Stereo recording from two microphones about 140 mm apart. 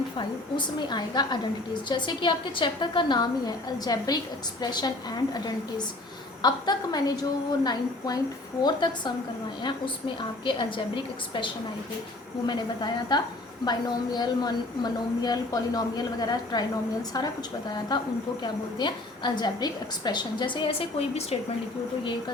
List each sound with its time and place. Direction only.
0.2 s a woman's voice: 35° left (ahead or behind)
6.4 s a woman's voice: 30° left (ahead or behind)
17.9 s a woman's voice: 30° left (ahead or behind)